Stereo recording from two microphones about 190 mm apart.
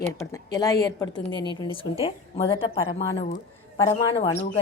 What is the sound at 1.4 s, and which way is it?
Speech, 20° right (ahead or behind).